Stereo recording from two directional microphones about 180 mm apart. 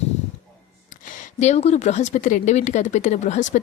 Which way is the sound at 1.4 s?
40° left (ahead or behind).